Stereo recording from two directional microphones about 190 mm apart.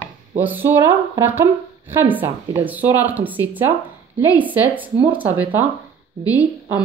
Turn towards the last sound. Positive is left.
turn(degrees=-5)  # may be behind; listen again after turning